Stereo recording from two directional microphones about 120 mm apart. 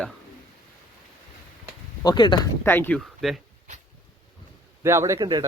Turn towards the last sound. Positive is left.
turn(degrees=-35)  # may be behind; listen again after turning